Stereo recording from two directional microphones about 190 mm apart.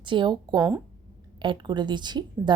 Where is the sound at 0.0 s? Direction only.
25° right (ahead or behind).